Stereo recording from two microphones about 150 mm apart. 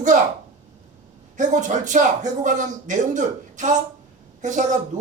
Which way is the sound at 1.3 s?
55° right (ahead or behind).